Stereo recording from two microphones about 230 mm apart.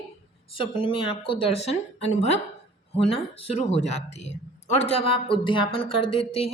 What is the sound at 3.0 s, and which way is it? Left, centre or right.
Speech, left.